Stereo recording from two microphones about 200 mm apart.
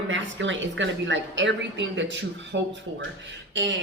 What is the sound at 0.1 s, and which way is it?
Speech, 70° right (ahead or behind).